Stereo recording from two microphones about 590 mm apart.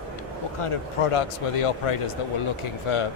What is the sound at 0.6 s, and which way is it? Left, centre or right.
Speech, left.